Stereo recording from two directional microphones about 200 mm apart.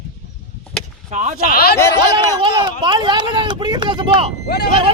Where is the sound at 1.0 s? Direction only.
35° right (ahead or behind).